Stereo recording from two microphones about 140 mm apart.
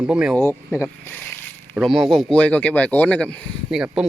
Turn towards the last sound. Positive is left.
turn(degrees=-5)  # may be behind; listen again after turning